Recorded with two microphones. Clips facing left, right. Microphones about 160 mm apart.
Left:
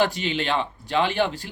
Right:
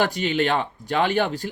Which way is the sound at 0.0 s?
45° right (ahead or behind).